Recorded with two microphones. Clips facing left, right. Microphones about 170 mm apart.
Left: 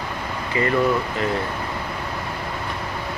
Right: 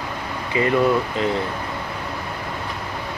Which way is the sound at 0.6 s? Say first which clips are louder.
Right 2 dB; 20° right (ahead or behind).